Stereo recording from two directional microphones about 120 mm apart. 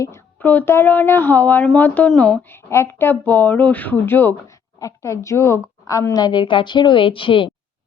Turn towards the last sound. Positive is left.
turn(degrees=45)  # may be behind; listen again after turning